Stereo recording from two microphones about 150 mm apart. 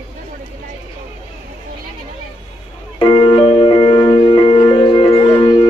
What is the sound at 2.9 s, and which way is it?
Music, 35° left (ahead or behind).